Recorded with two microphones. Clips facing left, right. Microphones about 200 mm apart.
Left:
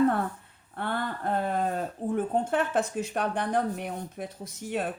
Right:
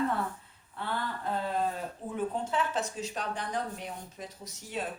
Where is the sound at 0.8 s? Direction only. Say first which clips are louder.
Left 4 dB; 55° left (ahead or behind).